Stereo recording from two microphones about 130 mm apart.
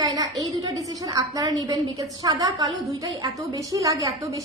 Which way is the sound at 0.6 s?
30° right (ahead or behind).